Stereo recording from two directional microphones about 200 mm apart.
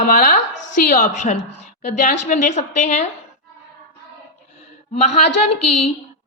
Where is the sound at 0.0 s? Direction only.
45° left (ahead or behind).